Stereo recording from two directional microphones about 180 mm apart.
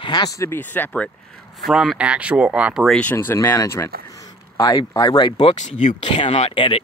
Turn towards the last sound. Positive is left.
turn(degrees=30)  # may be behind; listen again after turning